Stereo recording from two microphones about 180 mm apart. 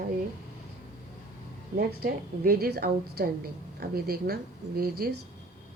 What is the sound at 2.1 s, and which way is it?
A woman's voice, 55° right (ahead or behind).